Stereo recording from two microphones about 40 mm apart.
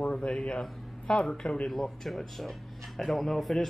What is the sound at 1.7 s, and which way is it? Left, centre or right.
Speech, centre.